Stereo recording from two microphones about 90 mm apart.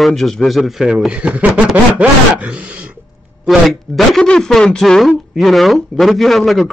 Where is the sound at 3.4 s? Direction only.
Centre (ahead or behind).